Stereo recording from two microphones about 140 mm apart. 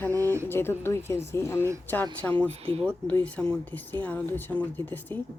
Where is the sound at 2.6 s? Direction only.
40° right (ahead or behind).